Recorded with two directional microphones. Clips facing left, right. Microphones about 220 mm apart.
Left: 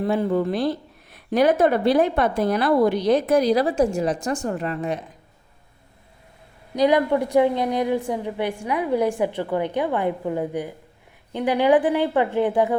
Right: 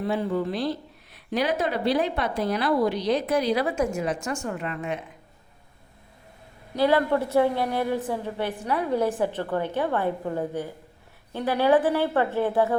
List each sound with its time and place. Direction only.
0.0 s speech: 50° left (ahead or behind)
6.7 s a woman's voice: 15° left (ahead or behind)